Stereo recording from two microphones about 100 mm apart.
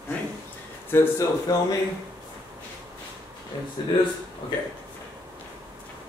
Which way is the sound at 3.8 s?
45° left (ahead or behind).